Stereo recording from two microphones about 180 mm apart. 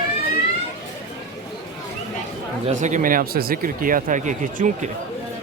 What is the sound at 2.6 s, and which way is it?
Speech, 40° right (ahead or behind).